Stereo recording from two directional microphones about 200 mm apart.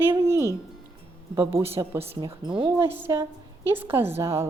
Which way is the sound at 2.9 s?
10° right (ahead or behind).